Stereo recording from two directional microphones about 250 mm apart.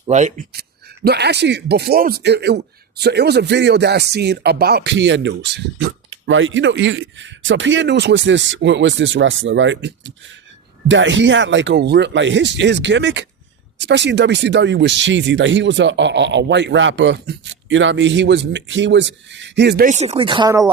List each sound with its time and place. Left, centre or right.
0.0 s speech: right
1.0 s a man's voice: right; by 20.7 s centre